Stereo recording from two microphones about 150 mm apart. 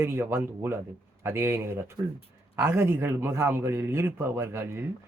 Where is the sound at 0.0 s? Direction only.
15° right (ahead or behind).